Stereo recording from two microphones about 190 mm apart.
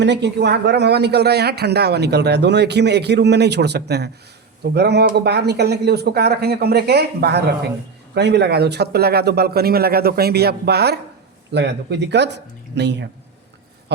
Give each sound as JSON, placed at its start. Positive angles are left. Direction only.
{"t": 0.0, "sound": "speech", "side_deg": -65}